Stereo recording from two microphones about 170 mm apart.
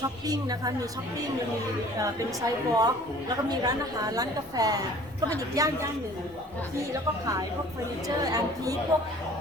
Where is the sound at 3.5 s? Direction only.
20° right (ahead or behind).